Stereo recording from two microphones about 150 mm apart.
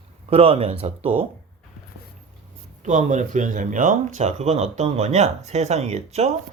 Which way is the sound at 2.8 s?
55° right (ahead or behind).